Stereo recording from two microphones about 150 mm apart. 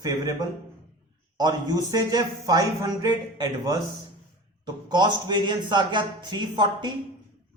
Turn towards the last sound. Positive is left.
turn(degrees=-30)  # may be behind; listen again after turning